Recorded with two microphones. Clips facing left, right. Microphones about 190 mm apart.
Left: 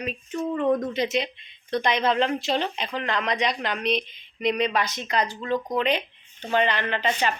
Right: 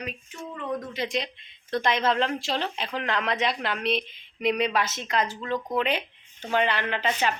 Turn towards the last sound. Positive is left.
turn(degrees=-5)  # may be behind; listen again after turning